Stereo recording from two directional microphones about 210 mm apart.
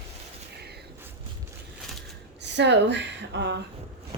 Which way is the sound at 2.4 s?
55° right (ahead or behind).